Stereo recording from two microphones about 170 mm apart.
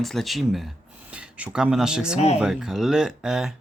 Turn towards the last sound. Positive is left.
turn(degrees=-5)  # may be behind; listen again after turning